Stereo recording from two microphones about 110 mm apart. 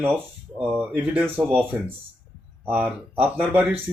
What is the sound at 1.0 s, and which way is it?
Speech, 15° right (ahead or behind).